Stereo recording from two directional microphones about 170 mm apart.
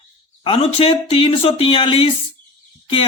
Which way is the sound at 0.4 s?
35° left (ahead or behind).